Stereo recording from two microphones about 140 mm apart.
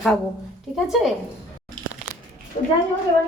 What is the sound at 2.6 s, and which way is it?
Speech, 70° left (ahead or behind).